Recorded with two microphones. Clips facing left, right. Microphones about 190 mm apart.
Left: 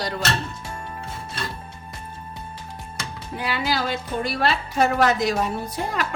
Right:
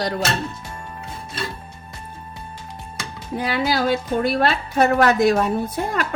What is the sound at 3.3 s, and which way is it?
A woman's voice, 45° right (ahead or behind).